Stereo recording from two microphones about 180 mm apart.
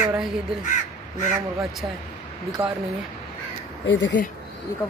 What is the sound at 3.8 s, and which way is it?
Speech, 85° left.